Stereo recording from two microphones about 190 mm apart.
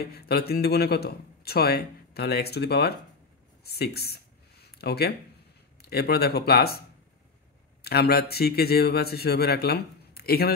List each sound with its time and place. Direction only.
0.0 s speech: 55° left (ahead or behind)
3.6 s a sound: 55° left (ahead or behind)
5.8 s speech: 55° left (ahead or behind)
7.8 s speech: 55° left (ahead or behind)